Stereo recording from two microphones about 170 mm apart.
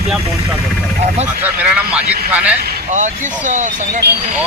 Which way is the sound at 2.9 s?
45° right (ahead or behind).